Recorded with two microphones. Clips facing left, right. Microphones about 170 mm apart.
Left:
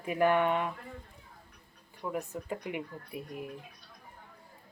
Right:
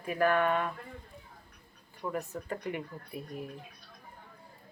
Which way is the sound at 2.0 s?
10° left (ahead or behind).